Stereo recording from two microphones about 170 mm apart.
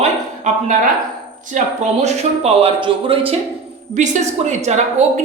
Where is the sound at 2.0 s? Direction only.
35° right (ahead or behind).